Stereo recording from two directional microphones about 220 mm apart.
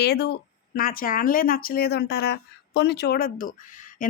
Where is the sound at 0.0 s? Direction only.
45° left (ahead or behind).